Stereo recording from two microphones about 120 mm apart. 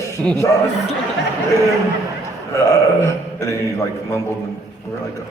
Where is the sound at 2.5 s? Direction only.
25° left (ahead or behind).